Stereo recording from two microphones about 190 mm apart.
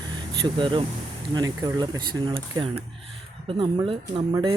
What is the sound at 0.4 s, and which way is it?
Speech, 25° right (ahead or behind).